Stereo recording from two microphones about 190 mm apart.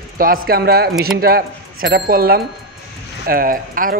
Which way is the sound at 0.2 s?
50° right (ahead or behind).